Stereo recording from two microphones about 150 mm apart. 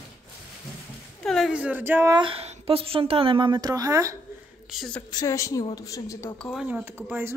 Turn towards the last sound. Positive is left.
turn(degrees=-15)  # may be behind; listen again after turning